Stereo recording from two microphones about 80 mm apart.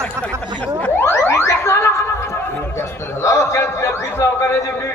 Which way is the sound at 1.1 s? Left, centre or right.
Left.